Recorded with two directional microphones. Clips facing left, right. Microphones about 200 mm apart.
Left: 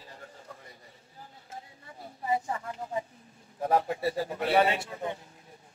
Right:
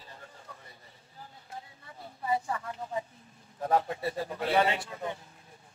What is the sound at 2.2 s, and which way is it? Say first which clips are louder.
Speech: left 1 dB; 25° left (ahead or behind).